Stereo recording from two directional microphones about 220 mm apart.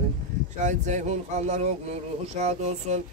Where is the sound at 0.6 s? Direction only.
35° right (ahead or behind).